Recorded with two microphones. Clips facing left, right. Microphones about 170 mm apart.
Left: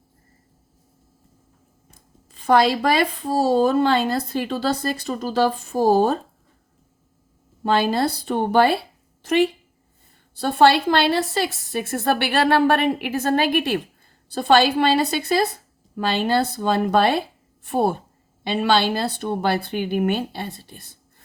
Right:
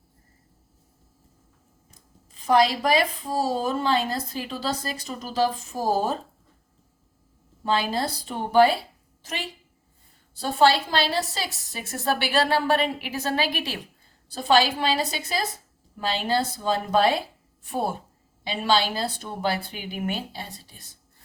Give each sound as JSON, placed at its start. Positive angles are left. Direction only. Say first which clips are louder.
{"t": 1.9, "sound": "speech", "louder": "left 3 dB", "side_deg": 65}
{"t": 7.6, "sound": "a woman's voice", "louder": "left 5 dB", "side_deg": 60}